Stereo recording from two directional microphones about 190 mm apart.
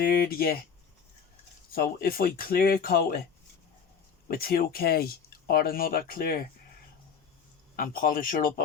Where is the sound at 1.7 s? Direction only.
50° left (ahead or behind).